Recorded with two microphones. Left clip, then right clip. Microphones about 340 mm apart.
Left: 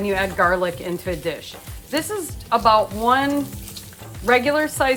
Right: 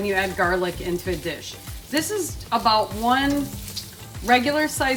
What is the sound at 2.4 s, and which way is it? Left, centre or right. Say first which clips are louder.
Speech: left 4 dB; centre.